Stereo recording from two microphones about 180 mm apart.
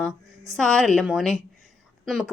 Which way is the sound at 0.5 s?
Centre (ahead or behind).